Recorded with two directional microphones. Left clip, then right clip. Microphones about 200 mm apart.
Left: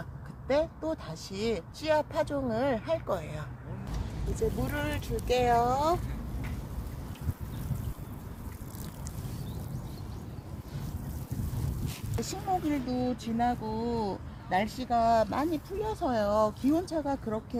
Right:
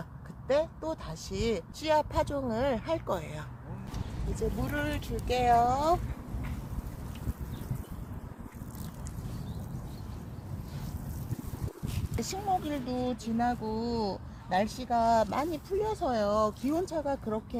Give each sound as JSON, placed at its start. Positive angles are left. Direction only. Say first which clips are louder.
{"t": 0.4, "sound": "speech", "louder": "even", "side_deg": -35}
{"t": 4.4, "sound": "speech", "louder": "left 1 dB", "side_deg": -25}
{"t": 12.2, "sound": "speech", "louder": "even", "side_deg": -35}